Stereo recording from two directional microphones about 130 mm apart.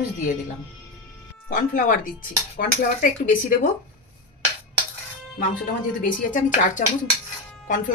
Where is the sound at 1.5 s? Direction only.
90° left.